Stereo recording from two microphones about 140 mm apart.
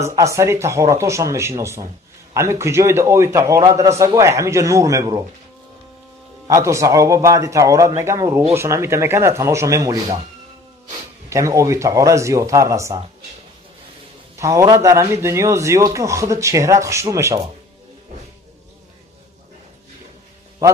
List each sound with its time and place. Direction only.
0.0 s a man's voice: 20° right (ahead or behind)
6.5 s a man's voice: 20° right (ahead or behind)
11.2 s a man's voice: 20° right (ahead or behind)
14.4 s a man's voice: 20° right (ahead or behind)